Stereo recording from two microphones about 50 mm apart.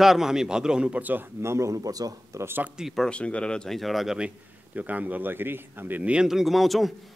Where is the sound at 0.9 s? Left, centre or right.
Right.